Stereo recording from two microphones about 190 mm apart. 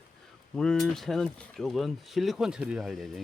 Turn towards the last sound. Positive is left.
turn(degrees=0)  # may be behind; listen again after turning